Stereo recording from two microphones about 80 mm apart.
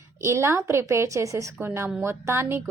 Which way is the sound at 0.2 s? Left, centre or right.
Right.